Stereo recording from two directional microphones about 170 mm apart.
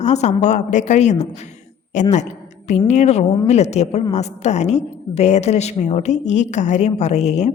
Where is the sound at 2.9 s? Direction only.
40° left (ahead or behind).